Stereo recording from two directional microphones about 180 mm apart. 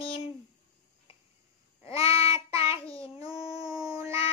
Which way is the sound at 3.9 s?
15° right (ahead or behind).